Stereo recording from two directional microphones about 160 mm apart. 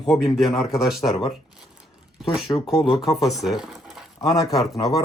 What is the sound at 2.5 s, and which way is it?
Speech, centre (ahead or behind).